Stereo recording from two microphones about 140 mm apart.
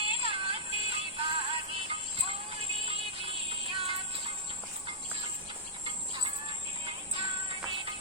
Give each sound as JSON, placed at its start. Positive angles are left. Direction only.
{"t": 0.0, "sound": "music", "side_deg": -40}
{"t": 6.8, "sound": "music", "side_deg": -40}